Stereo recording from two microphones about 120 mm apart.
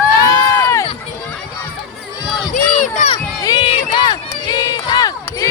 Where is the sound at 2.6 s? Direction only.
90° left.